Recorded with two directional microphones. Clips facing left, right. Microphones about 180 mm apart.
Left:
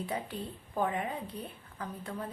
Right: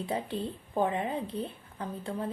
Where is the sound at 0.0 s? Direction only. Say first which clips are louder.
Right 4 dB; 25° right (ahead or behind).